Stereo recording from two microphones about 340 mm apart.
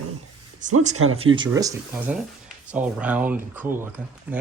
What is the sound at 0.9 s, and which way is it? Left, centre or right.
Speech, right.